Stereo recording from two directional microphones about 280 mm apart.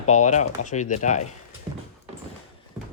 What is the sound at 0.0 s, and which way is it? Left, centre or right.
Speech, left.